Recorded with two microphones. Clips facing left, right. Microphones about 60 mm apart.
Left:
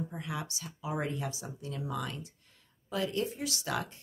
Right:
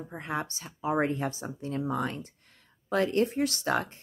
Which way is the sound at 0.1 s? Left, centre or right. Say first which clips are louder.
Right 5 dB; right.